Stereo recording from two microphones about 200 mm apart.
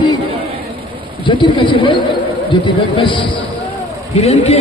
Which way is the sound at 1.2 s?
25° left (ahead or behind).